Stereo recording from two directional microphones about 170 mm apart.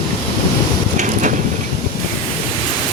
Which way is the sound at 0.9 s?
45° right (ahead or behind).